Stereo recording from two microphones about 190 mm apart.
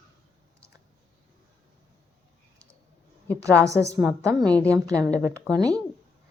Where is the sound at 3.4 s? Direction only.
15° right (ahead or behind).